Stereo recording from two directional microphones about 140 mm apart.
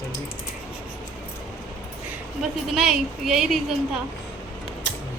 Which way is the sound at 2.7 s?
Centre (ahead or behind).